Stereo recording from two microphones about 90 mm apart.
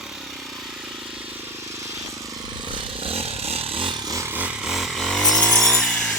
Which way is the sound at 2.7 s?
90° right.